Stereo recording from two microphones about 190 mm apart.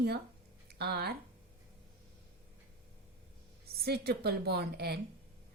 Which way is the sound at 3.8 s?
55° right (ahead or behind).